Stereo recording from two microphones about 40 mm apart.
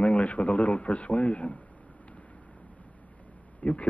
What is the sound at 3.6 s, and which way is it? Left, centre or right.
Speech, left.